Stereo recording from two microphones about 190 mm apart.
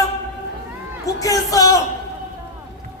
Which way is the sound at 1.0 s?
15° left (ahead or behind).